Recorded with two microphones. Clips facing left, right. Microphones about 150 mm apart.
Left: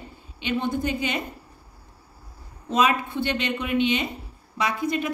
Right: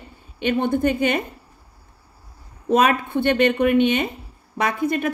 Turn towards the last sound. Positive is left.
turn(degrees=-55)  # may be behind; listen again after turning